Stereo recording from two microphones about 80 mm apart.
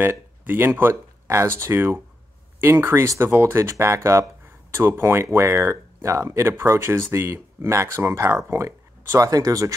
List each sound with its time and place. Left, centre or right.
0.0 s speech: right